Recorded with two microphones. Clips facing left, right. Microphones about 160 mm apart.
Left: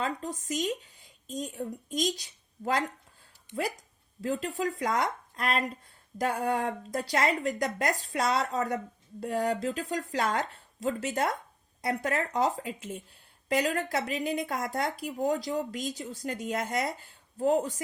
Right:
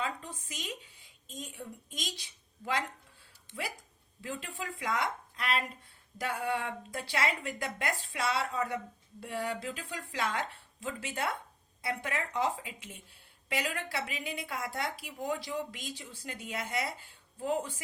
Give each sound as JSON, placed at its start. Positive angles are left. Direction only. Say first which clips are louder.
{"t": 0.0, "sound": "speech", "louder": "left 5 dB", "side_deg": 45}
{"t": 4.2, "sound": "a woman's voice", "louder": "left 10 dB", "side_deg": 40}